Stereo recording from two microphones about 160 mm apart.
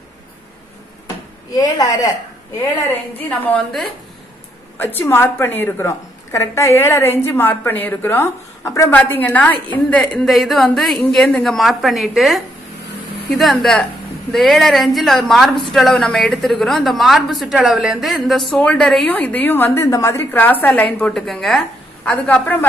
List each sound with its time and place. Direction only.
1.6 s speech: 20° left (ahead or behind)
2.9 s a woman's voice: 10° left (ahead or behind)